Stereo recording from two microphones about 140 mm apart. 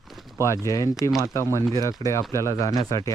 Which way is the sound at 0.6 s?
25° left (ahead or behind).